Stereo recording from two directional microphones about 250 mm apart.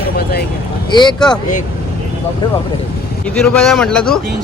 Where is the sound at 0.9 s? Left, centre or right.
Centre.